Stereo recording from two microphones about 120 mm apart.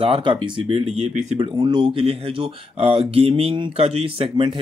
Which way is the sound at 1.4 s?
40° right (ahead or behind).